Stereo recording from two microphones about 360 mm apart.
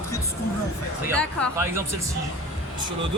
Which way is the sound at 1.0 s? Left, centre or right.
Centre.